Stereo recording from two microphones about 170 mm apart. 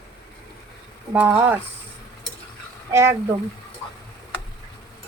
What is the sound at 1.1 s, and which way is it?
Speech, 10° right (ahead or behind).